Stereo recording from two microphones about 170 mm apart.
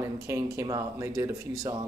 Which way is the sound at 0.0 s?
15° right (ahead or behind).